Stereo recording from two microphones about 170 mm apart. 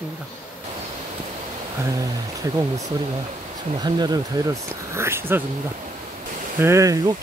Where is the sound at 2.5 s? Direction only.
20° right (ahead or behind).